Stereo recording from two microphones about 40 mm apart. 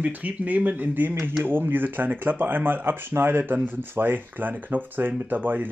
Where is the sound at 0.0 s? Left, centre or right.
Right.